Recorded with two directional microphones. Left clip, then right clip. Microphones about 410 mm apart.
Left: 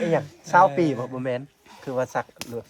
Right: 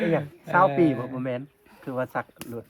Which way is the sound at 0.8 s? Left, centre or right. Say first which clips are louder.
Right 1 dB; left.